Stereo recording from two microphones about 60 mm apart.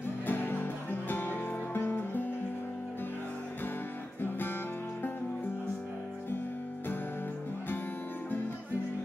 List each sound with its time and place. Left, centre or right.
0.3 s music: left